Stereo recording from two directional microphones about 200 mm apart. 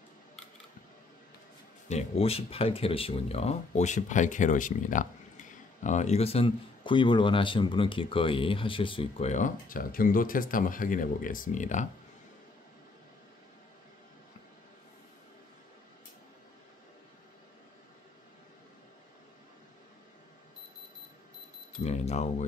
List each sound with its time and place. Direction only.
1.9 s speech: 30° left (ahead or behind)
21.8 s speech: 35° left (ahead or behind)